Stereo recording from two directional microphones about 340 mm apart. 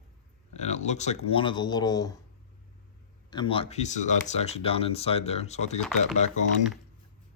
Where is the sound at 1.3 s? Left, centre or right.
Centre.